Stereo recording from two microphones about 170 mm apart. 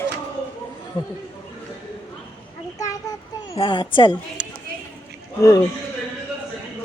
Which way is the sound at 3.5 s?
30° left (ahead or behind).